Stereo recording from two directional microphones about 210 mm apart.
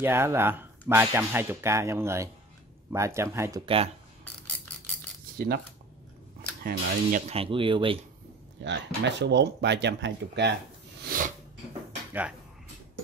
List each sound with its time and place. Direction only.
0.0 s speech: 10° right (ahead or behind)
3.6 s speech: 25° right (ahead or behind)
6.6 s speech: 40° right (ahead or behind)
8.6 s speech: 55° right (ahead or behind)
11.1 s a sound: 40° right (ahead or behind)
12.1 s speech: 5° right (ahead or behind)